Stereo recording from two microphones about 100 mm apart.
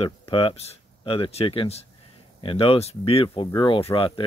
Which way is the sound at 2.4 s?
65° left (ahead or behind).